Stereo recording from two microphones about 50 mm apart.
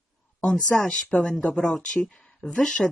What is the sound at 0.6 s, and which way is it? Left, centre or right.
Speech, left.